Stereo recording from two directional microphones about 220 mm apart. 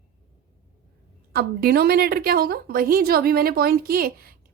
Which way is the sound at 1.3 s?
45° right (ahead or behind).